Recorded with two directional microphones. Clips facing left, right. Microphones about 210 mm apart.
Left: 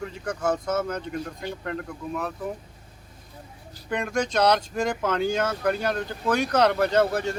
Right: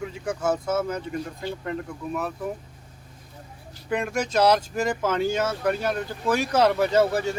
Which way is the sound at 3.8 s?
5° right (ahead or behind).